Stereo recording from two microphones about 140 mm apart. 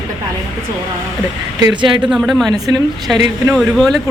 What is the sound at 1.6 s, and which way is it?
Speech, 35° right (ahead or behind).